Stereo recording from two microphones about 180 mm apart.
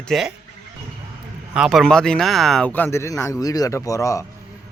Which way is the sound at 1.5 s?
Centre (ahead or behind).